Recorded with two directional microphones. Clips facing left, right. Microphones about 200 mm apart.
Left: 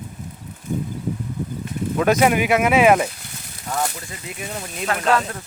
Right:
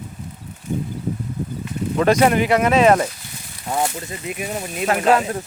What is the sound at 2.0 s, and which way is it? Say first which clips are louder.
Speech: right 2 dB; 5° left (ahead or behind).